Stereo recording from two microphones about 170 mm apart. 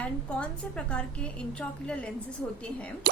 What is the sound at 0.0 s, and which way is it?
A woman's voice, 5° left (ahead or behind).